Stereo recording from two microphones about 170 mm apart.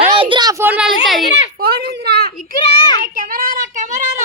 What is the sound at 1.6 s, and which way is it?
Speech, 65° right (ahead or behind).